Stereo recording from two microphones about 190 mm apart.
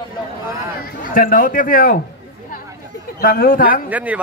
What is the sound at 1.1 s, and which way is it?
Speech, 45° left (ahead or behind).